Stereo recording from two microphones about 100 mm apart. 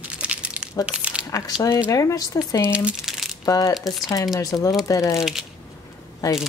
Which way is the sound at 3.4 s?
35° left (ahead or behind).